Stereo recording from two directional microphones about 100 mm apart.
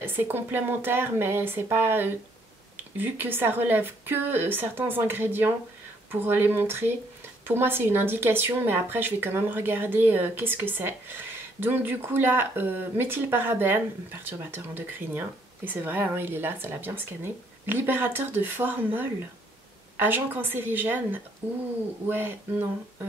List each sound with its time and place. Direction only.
0.0 s a woman's voice: 20° right (ahead or behind)
20.0 s a woman's voice: 20° right (ahead or behind)